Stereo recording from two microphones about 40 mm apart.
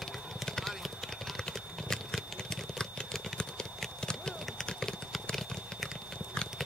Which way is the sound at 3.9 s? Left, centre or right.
Centre.